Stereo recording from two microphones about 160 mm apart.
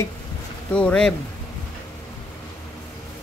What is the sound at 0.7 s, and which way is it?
Speech, 5° left (ahead or behind).